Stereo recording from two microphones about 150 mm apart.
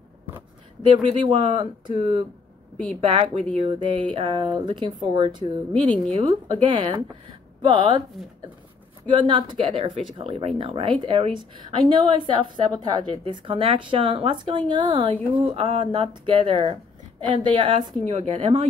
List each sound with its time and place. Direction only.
0.8 s speech: 35° right (ahead or behind)
6.4 s speech: 35° right (ahead or behind)
9.1 s speech: 30° right (ahead or behind)